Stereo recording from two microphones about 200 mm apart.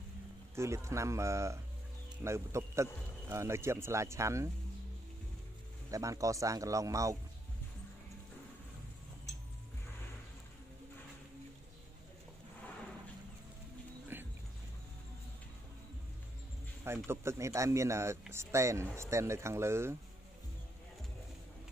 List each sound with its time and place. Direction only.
0.6 s speech: 15° right (ahead or behind)
5.9 s speech: 15° right (ahead or behind)
14.1 s clip-clop: 10° right (ahead or behind)
16.8 s speech: 10° right (ahead or behind)